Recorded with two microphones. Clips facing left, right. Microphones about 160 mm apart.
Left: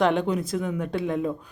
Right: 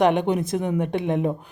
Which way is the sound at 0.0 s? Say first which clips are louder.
Right 3 dB; 20° right (ahead or behind).